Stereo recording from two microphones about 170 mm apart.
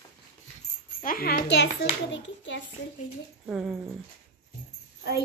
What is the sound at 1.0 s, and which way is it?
A child's voice, 55° left (ahead or behind).